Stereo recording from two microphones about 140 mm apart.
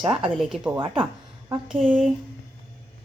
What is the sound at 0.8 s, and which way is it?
Speech, 35° right (ahead or behind).